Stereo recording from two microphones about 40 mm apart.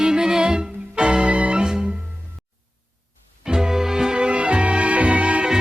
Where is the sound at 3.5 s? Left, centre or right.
Centre; by 5.5 s right.